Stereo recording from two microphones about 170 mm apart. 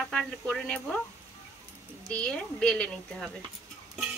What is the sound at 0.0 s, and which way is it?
Speech, centre (ahead or behind).